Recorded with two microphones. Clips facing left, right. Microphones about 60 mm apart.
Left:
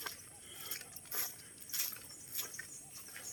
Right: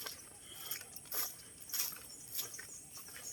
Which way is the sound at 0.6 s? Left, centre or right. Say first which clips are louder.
Left 1 dB; centre.